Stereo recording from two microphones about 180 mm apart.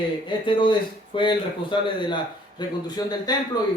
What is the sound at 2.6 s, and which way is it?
Speech, 25° left (ahead or behind).